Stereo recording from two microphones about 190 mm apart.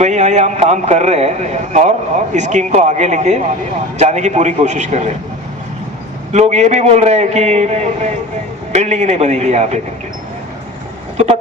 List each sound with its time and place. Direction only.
0.0 s speech: 40° right (ahead or behind)
6.3 s speech: 35° right (ahead or behind)